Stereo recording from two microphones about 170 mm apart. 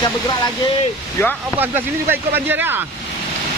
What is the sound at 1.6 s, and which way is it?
Speech, 10° right (ahead or behind).